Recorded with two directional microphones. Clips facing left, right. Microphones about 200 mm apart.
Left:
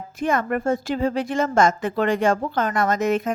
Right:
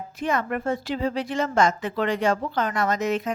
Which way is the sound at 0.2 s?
50° left (ahead or behind).